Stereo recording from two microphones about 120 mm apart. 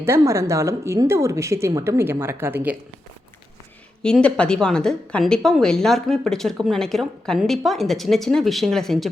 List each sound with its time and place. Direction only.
0.0 s speech: 25° right (ahead or behind)
4.0 s a woman's voice: 10° left (ahead or behind)